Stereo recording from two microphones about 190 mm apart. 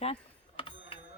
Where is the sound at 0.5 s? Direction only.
25° left (ahead or behind).